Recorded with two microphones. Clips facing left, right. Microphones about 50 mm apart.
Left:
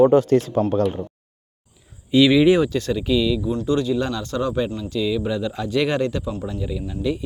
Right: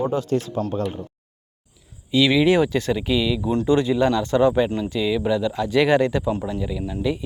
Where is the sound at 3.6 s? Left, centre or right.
Right; by 6.2 s centre.